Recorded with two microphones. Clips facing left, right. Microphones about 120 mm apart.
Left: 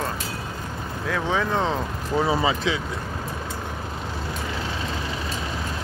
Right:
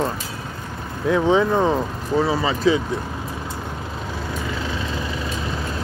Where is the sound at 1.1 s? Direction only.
15° right (ahead or behind).